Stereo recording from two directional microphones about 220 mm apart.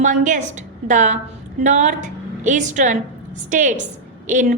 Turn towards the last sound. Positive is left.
turn(degrees=-35)  # may be behind; listen again after turning